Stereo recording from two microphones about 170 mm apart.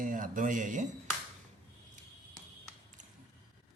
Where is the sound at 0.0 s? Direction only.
50° right (ahead or behind).